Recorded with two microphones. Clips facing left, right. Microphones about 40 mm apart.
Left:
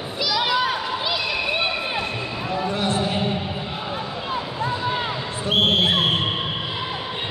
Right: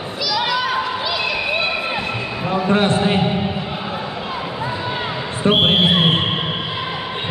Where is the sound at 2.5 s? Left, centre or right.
Right.